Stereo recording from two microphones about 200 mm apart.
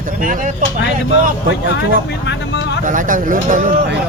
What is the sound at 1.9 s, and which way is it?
Speech, 60° left (ahead or behind).